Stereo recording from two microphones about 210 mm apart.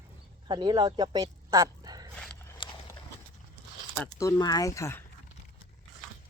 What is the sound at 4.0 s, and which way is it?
Speech, 15° left (ahead or behind).